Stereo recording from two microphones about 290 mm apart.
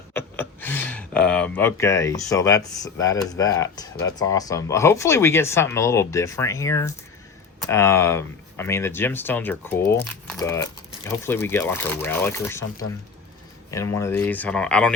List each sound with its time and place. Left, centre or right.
0.1 s speech: centre
13.7 s speech: centre